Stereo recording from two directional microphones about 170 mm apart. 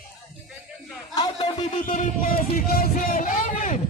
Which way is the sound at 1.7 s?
50° left (ahead or behind).